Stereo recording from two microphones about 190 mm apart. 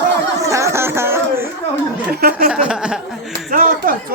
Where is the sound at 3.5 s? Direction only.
45° right (ahead or behind).